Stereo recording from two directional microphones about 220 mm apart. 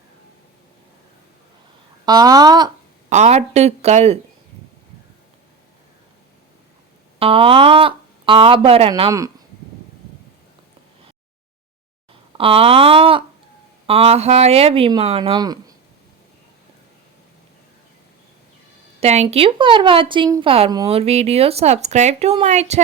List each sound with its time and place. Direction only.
2.0 s speech: 15° right (ahead or behind)
3.1 s speech: 30° right (ahead or behind)
7.2 s speech: 25° right (ahead or behind)
12.4 s speech: 25° right (ahead or behind)
18.9 s speech: 30° right (ahead or behind)